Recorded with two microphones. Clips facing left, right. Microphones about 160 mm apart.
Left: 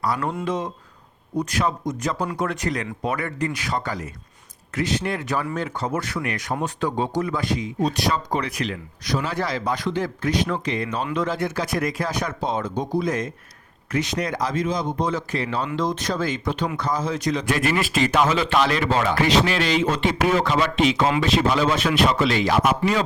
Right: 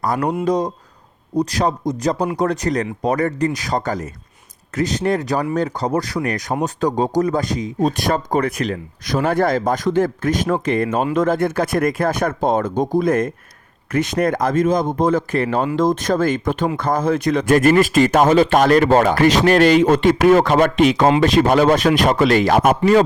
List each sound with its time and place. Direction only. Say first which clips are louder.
0.0 s speech: right 6 dB; 45° right (ahead or behind)